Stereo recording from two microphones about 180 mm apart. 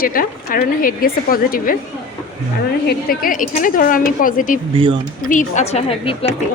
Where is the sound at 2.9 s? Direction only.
55° left (ahead or behind).